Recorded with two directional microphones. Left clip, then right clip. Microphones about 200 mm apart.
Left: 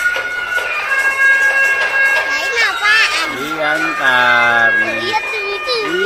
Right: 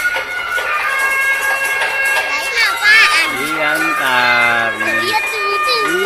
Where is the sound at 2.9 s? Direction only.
30° left (ahead or behind).